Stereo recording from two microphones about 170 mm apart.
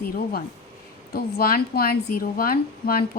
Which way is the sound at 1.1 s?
60° left (ahead or behind).